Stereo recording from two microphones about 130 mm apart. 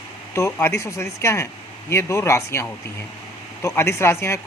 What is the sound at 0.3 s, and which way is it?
Speech, 20° left (ahead or behind).